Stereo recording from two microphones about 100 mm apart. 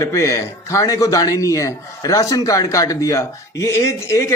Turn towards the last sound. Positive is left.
turn(degrees=30)  # may be behind; listen again after turning